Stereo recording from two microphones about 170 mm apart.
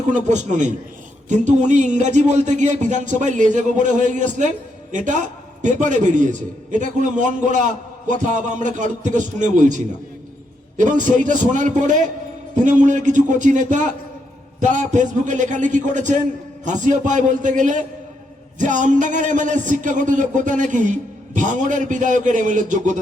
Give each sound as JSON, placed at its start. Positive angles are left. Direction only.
{"t": 0.1, "sound": "speech", "side_deg": -45}
{"t": 11.0, "sound": "speech", "side_deg": -50}